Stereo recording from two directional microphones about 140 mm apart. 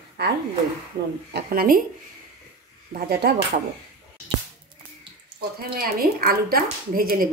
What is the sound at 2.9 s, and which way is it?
Speech, 90° right.